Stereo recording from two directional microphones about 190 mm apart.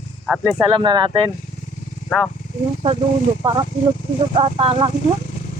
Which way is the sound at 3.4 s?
30° right (ahead or behind).